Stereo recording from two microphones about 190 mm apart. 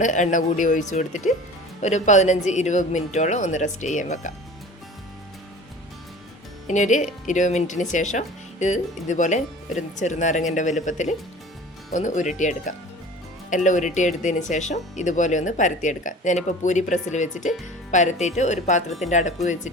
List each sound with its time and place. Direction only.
0.0 s speech: 40° left (ahead or behind)
6.7 s speech: 40° left (ahead or behind)